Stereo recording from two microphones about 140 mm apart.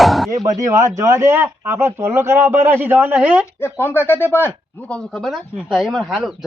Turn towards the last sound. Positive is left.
turn(degrees=0)  # may be behind; listen again after turning